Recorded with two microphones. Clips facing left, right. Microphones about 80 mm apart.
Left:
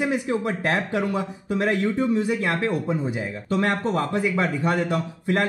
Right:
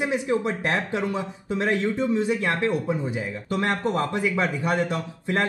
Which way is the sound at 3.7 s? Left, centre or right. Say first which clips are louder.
Left 1 dB; left.